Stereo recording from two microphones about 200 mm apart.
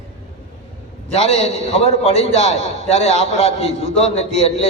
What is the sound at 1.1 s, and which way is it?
A man's voice, 30° left (ahead or behind).